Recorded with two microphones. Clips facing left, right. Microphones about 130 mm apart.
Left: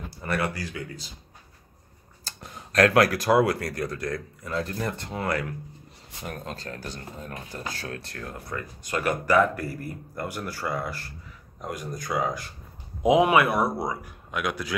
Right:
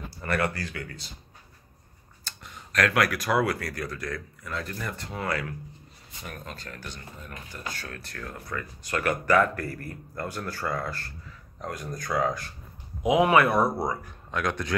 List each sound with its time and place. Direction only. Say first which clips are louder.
0.2 s speech: even; 10° left (ahead or behind)
2.2 s speech: left 3 dB; 35° left (ahead or behind); by 12.4 s 10° left (ahead or behind)
13.0 s speech: left 1 dB; 20° left (ahead or behind)